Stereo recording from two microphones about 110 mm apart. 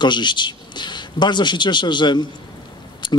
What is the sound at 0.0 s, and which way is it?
Speech, 45° left (ahead or behind).